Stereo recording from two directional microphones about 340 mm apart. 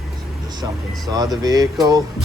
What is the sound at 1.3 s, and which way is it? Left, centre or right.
Speech, centre.